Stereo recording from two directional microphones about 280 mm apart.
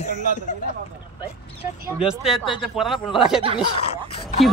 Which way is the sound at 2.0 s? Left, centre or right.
Centre.